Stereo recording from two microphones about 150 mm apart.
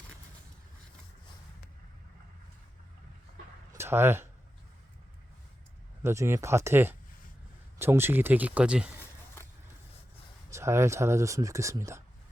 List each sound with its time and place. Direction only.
3.7 s a sound: 15° right (ahead or behind)
6.0 s speech: 15° right (ahead or behind)
10.5 s speech: 20° right (ahead or behind)